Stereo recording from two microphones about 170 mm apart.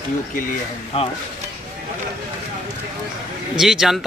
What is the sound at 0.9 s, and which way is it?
Speech, 35° left (ahead or behind).